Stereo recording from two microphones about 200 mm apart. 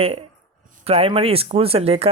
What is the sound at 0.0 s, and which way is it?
Speech, 30° right (ahead or behind).